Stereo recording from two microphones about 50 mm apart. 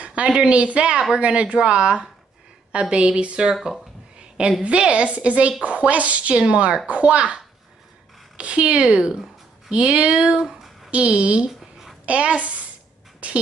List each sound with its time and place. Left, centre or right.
0.0 s speech: right
4.6 s a woman's voice: right
10.4 s a sound: centre
10.9 s speech: right
11.6 s a sound: centre
12.1 s speech: right